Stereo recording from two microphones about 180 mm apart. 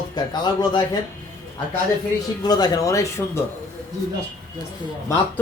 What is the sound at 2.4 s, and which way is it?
Speech, 20° left (ahead or behind).